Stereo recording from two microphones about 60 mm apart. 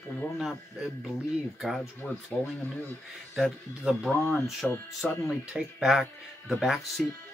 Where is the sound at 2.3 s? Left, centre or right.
Left.